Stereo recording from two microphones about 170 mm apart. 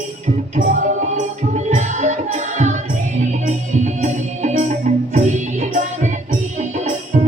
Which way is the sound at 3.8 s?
45° right (ahead or behind).